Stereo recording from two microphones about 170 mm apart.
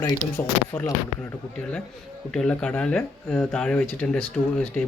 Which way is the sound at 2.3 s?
5° left (ahead or behind).